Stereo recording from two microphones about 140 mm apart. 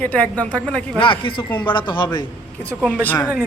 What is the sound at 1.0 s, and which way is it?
Speech, 35° left (ahead or behind).